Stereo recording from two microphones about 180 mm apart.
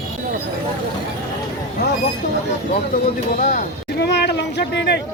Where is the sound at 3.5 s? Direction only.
50° left (ahead or behind).